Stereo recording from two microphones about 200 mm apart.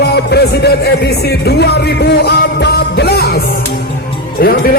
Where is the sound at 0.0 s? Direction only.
55° left (ahead or behind).